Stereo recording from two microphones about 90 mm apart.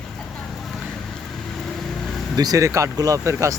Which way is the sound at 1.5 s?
5° left (ahead or behind).